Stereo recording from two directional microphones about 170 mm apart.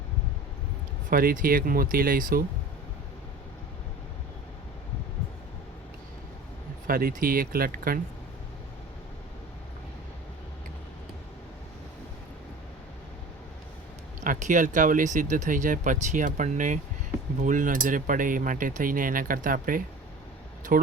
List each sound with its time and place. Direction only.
1.1 s speech: 55° right (ahead or behind)
6.8 s speech: 55° right (ahead or behind)
14.2 s speech: 45° right (ahead or behind)